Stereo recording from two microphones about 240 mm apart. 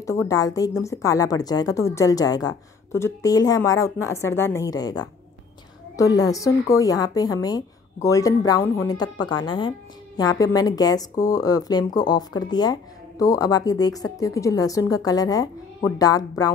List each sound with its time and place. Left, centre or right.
0.3 s speech: centre